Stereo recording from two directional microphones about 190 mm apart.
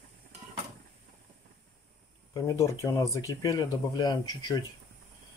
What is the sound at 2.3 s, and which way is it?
Speech, 20° left (ahead or behind).